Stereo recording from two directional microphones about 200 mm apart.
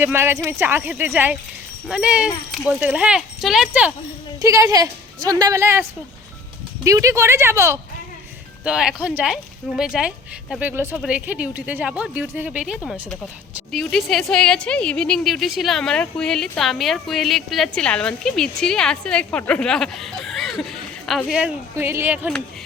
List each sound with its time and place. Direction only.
0.0 s a woman's voice: 10° right (ahead or behind)